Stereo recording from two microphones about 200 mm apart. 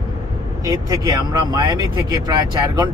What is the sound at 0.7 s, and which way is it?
Speech, 15° right (ahead or behind).